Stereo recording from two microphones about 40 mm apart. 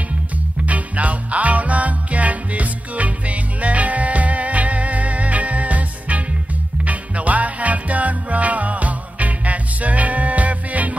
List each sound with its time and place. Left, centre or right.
0.7 s music: right